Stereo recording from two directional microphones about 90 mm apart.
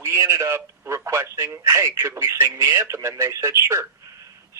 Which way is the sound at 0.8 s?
30° right (ahead or behind).